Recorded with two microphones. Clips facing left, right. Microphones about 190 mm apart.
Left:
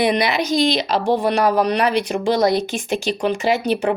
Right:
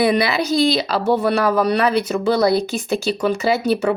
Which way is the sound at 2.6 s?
35° right (ahead or behind).